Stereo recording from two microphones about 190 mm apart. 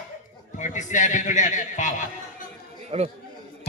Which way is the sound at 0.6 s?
40° left (ahead or behind).